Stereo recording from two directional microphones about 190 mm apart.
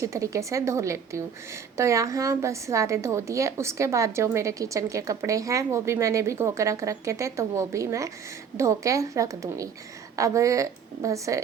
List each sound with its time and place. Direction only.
0.0 s a woman's voice: 15° right (ahead or behind)